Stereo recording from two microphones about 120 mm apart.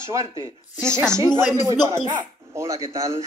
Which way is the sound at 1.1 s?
25° right (ahead or behind).